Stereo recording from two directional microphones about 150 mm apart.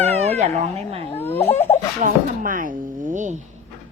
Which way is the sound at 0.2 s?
45° right (ahead or behind).